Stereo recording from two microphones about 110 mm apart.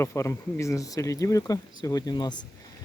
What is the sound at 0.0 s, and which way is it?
Speech, 25° left (ahead or behind).